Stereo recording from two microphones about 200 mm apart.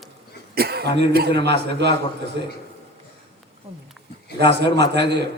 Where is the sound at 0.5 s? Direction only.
50° right (ahead or behind).